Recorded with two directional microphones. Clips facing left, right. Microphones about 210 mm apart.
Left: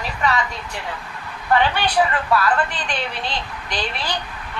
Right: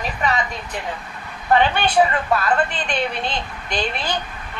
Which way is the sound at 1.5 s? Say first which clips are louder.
Right 2 dB; 20° right (ahead or behind).